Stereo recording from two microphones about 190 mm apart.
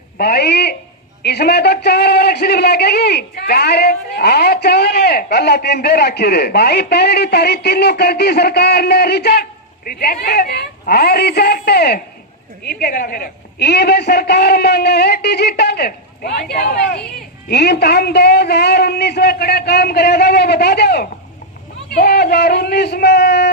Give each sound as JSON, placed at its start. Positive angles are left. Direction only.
{"t": 0.2, "sound": "a man's voice", "side_deg": 55}